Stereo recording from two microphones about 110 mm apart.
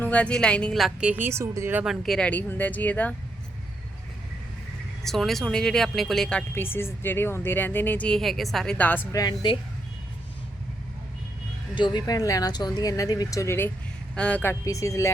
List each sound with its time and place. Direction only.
0.0 s a woman's voice: 10° left (ahead or behind); by 1.8 s 25° right (ahead or behind)
1.8 s speech: centre (ahead or behind)
5.0 s a woman's voice: centre (ahead or behind)
6.5 s speech: 20° left (ahead or behind)
9.1 s speech: 40° left (ahead or behind)
11.7 s speech: 45° left (ahead or behind); by 14.5 s 10° left (ahead or behind)
14.6 s speech: 30° left (ahead or behind)